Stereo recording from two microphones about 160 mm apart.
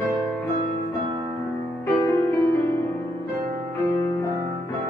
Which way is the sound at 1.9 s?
15° left (ahead or behind).